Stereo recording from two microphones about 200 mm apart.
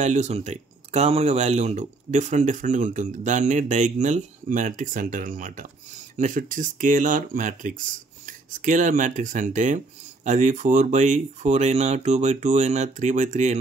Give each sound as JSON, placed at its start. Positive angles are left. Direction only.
{"t": 0.0, "sound": "speech", "side_deg": -35}